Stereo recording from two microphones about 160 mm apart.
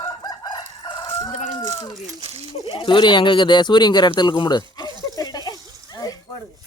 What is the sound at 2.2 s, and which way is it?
Speech, 40° right (ahead or behind).